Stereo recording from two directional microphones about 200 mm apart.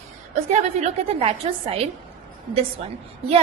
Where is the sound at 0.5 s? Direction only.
35° right (ahead or behind).